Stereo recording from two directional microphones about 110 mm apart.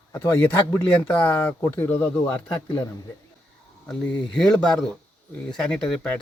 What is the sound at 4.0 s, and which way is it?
Speech, 10° left (ahead or behind).